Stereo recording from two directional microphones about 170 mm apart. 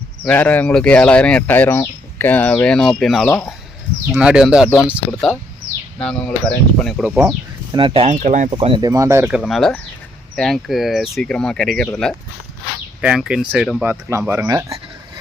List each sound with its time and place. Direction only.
0.3 s speech: 10° left (ahead or behind)
3.2 s speech: 15° left (ahead or behind)
4.1 s speech: 5° right (ahead or behind)
7.0 s speech: 10° right (ahead or behind)
7.7 s speech: 30° right (ahead or behind)
8.1 s speech: 45° right (ahead or behind)
8.4 s speech: 30° right (ahead or behind); by 9.4 s 10° right (ahead or behind)
9.4 s speech: 5° left (ahead or behind)
13.8 s speech: 15° right (ahead or behind)